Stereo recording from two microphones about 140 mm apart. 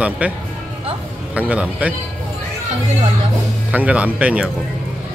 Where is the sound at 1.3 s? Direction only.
10° right (ahead or behind).